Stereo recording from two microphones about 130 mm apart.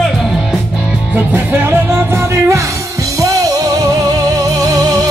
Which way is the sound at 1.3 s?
15° right (ahead or behind).